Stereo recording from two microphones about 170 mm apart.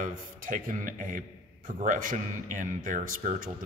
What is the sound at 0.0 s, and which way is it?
A man's voice, 50° right (ahead or behind).